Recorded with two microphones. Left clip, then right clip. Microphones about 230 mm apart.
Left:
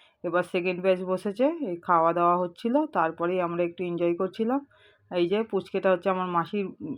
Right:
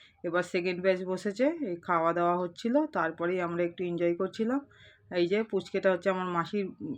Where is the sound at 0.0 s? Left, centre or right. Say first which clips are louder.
Left 4 dB; centre.